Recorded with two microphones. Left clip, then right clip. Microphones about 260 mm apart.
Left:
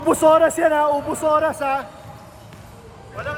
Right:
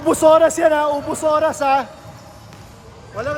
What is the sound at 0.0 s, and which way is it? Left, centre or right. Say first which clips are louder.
Speech: right 2 dB; centre.